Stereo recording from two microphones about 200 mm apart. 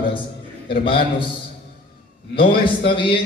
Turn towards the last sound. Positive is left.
turn(degrees=25)  # may be behind; listen again after turning